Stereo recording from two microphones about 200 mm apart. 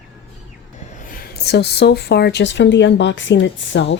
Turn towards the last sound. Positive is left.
turn(degrees=65)  # may be behind; listen again after turning